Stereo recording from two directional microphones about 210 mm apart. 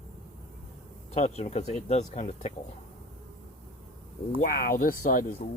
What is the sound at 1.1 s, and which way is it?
Speech, 30° left (ahead or behind).